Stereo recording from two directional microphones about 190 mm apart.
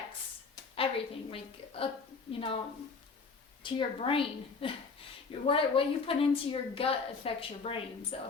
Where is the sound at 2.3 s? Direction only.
30° left (ahead or behind).